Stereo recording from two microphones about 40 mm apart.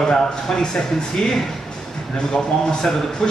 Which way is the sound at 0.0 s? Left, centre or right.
Centre.